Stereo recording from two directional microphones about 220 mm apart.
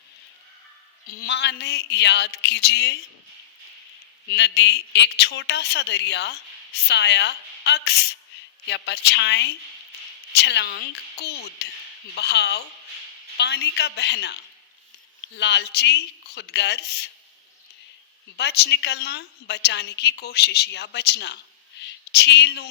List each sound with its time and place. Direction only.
1.0 s a woman's voice: 45° left (ahead or behind)
4.3 s a woman's voice: 50° left (ahead or behind)
15.4 s a woman's voice: 50° left (ahead or behind)
18.3 s a woman's voice: 50° left (ahead or behind)
21.8 s a sound: 50° left (ahead or behind)